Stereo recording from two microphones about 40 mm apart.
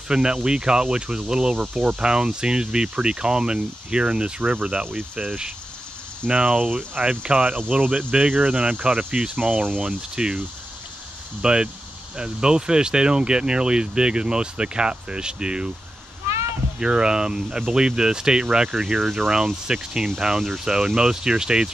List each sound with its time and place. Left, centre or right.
0.1 s speech: centre; by 7.1 s right
7.4 s speech: right
8.1 s speech: right
9.8 s speech: right
11.4 s speech: right
16.8 s speech: right